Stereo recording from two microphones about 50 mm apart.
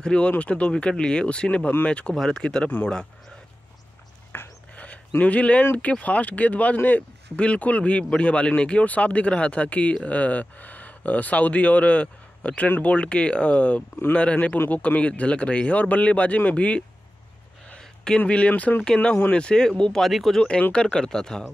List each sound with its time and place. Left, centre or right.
0.0 s speech: left
2.1 s speech: centre
4.3 s filing: left
4.7 s a sound: left
5.2 s speech: left
17.6 s a sound: centre
18.5 s speech: left
19.3 s speech: centre
20.0 s speech: centre
20.3 s speech: centre